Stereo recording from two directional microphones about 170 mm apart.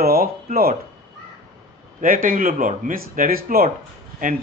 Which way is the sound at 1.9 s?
55° right (ahead or behind).